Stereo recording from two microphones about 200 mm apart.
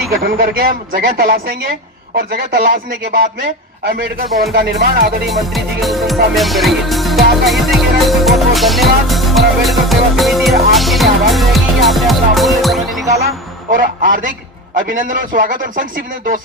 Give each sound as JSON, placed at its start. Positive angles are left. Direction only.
{"t": 0.2, "sound": "a man's voice", "side_deg": -50}
{"t": 5.3, "sound": "music", "side_deg": 0}
{"t": 6.3, "sound": "speech", "side_deg": 0}
{"t": 7.4, "sound": "music", "side_deg": 0}
{"t": 9.6, "sound": "speech", "side_deg": 0}
{"t": 13.7, "sound": "a man's voice", "side_deg": -45}